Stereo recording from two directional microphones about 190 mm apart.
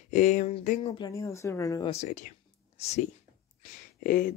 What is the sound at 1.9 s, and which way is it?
Speech, 35° left (ahead or behind).